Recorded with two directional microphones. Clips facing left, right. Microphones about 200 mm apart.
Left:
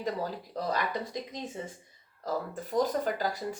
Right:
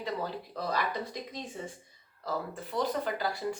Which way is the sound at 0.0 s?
40° left (ahead or behind).